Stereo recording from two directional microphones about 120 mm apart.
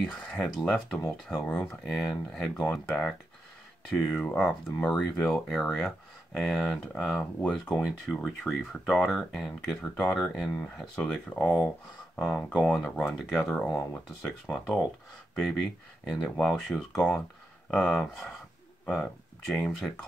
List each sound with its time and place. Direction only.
0.1 s speech: 10° left (ahead or behind)
16.2 s speech: 5° left (ahead or behind)
19.5 s speech: centre (ahead or behind)